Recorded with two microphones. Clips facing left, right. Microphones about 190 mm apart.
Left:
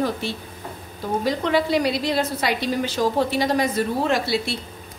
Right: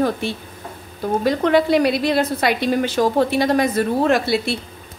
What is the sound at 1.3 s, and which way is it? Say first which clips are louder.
A woman's voice: right 5 dB; 55° right (ahead or behind).